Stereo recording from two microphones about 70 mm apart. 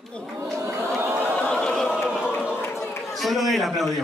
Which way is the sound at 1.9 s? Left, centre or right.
Centre.